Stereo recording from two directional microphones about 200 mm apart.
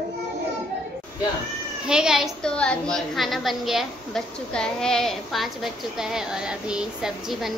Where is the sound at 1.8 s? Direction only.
5° right (ahead or behind).